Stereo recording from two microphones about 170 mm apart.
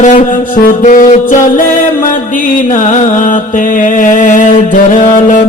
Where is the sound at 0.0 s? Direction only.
45° left (ahead or behind).